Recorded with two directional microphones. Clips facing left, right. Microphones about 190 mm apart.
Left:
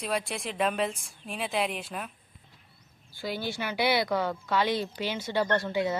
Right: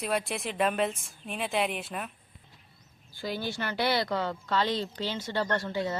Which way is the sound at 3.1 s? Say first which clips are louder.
Even; 10° left (ahead or behind).